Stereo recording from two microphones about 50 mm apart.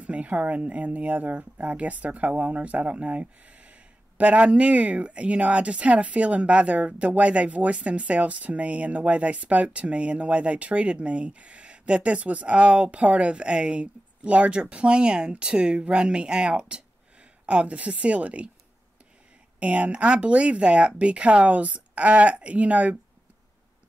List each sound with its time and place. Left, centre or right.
0.0 s speech: right
19.6 s speech: right